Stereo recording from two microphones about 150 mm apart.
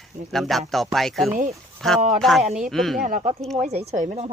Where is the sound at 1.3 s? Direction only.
60° right (ahead or behind).